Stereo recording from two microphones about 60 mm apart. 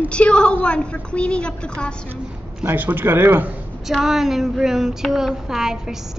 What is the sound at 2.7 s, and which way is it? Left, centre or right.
Speech, right.